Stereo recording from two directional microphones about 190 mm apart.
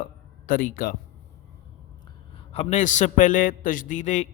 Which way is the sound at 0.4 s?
45° left (ahead or behind).